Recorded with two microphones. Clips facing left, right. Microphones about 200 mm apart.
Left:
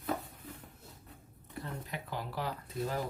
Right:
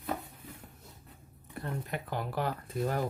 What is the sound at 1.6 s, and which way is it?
Speech, 55° right (ahead or behind).